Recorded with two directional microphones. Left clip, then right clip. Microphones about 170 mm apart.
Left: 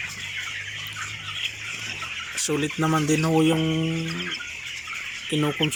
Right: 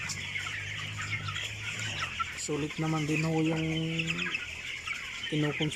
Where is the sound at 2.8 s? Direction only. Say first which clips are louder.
Left 10 dB; 25° left (ahead or behind).